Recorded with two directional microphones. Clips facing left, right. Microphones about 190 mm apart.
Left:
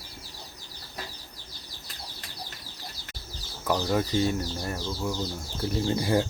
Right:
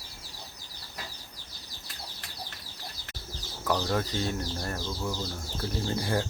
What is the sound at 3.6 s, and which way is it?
Speech, 10° left (ahead or behind).